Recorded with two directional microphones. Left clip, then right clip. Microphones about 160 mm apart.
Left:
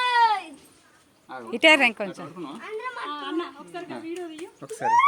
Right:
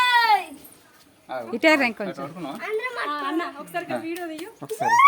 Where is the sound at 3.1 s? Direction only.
30° right (ahead or behind).